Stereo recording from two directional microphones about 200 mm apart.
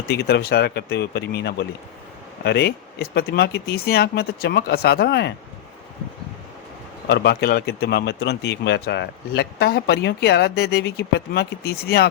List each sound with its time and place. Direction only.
0.1 s speech: 55° left (ahead or behind)
7.1 s speech: 55° left (ahead or behind)